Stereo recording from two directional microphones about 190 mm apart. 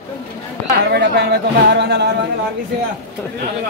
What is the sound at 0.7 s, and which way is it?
A woman's voice, 60° right (ahead or behind).